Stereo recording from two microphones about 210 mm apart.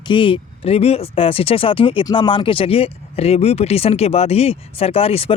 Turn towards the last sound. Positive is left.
turn(degrees=30)  # may be behind; listen again after turning